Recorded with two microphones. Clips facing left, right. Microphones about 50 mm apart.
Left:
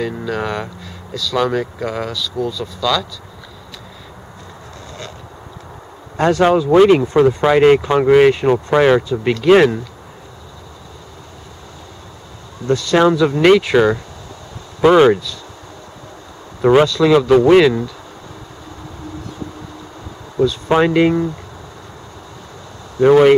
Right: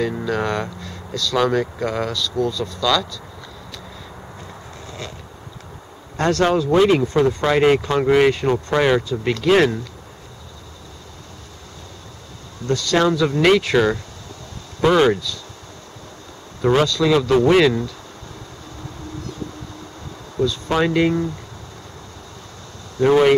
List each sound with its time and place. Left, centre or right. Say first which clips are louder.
0.0 s speech: even; centre
6.1 s speech: left 4 dB; centre
12.6 s speech: left 4 dB; centre
16.6 s speech: left 5 dB; centre
20.4 s speech: left 5 dB; left
22.9 s speech: left 5 dB; centre